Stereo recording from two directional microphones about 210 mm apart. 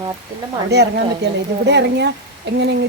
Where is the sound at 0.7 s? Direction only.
55° right (ahead or behind).